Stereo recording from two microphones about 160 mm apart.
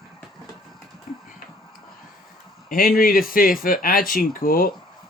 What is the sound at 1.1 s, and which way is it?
Music, 55° left (ahead or behind).